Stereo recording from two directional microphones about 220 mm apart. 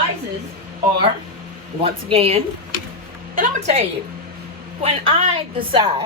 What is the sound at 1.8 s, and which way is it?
A woman's voice, 25° right (ahead or behind).